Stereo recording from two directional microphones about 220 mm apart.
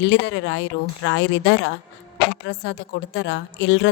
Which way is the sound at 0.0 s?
55° left (ahead or behind).